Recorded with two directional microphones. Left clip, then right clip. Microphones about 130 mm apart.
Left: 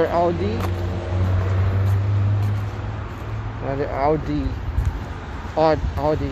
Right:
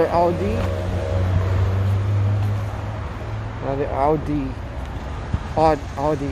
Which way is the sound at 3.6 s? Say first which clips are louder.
Right 1 dB; 20° right (ahead or behind).